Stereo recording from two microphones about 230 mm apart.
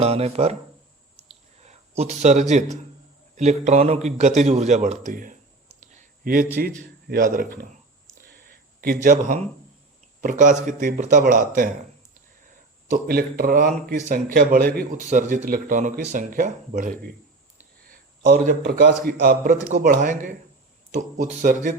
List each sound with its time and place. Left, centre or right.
0.0 s a man's voice: right
1.5 s a man's voice: right
5.8 s a sound: right
6.6 s a man's voice: right
8.2 s a sound: right
10.2 s a man's voice: right